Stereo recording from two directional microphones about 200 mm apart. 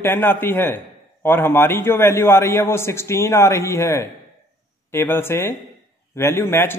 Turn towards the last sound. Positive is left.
turn(degrees=10)  # may be behind; listen again after turning